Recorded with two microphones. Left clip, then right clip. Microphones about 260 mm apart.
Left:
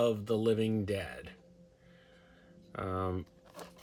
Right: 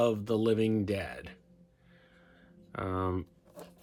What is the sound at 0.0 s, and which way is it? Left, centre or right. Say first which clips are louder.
Speech: right 2 dB; right.